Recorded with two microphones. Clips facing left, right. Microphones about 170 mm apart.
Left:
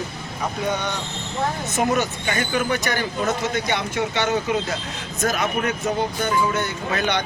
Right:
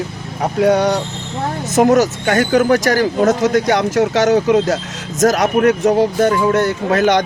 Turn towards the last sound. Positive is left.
turn(degrees=-90)